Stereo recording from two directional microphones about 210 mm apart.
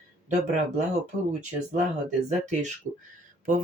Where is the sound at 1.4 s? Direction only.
35° right (ahead or behind).